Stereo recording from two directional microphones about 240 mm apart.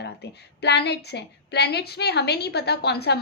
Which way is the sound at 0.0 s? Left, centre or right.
Left.